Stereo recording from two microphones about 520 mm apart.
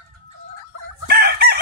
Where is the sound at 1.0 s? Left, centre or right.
Centre.